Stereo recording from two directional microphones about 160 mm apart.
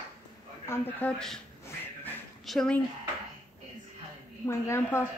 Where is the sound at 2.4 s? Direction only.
5° left (ahead or behind).